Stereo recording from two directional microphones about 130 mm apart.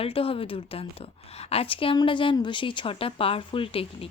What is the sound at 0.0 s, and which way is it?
A woman's voice, 45° left (ahead or behind).